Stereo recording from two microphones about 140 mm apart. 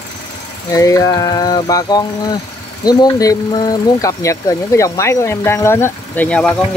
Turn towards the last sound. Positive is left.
turn(degrees=10)  # may be behind; listen again after turning